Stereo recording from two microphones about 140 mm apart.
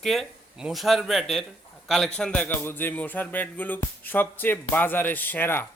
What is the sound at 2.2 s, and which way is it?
Music, 10° left (ahead or behind).